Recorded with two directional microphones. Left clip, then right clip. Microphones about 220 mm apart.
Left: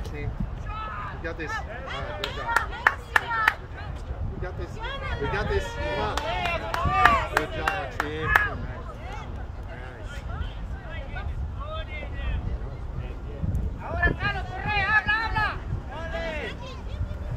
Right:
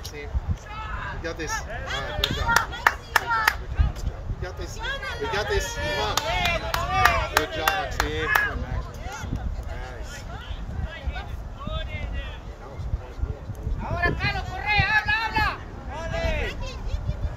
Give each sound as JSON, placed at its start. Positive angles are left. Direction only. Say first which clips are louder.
{"t": 1.2, "sound": "speech", "louder": "right 2 dB", "side_deg": -35}
{"t": 1.7, "sound": "speech", "louder": "right 3 dB", "side_deg": -50}
{"t": 2.8, "sound": "clapping", "louder": "right 1 dB", "side_deg": -30}
{"t": 4.4, "sound": "speech", "louder": "even", "side_deg": -35}
{"t": 4.8, "sound": "speech", "louder": "right 2 dB", "side_deg": -50}
{"t": 5.3, "sound": "speech", "louder": "right 3 dB", "side_deg": -35}
{"t": 5.6, "sound": "speech", "louder": "right 2 dB", "side_deg": -50}
{"t": 8.0, "sound": "speech", "louder": "left 1 dB", "side_deg": -30}
{"t": 13.8, "sound": "a sound", "louder": "right 1 dB", "side_deg": -35}